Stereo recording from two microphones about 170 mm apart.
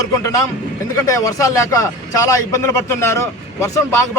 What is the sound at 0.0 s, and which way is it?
A man's voice, 20° left (ahead or behind).